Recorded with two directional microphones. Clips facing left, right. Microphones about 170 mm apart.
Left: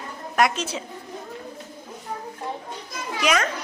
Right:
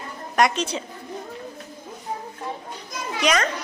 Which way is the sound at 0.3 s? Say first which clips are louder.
Right 1 dB; 5° left (ahead or behind).